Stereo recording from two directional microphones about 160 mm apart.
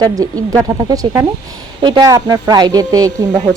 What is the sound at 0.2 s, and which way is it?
A woman's voice, 20° right (ahead or behind).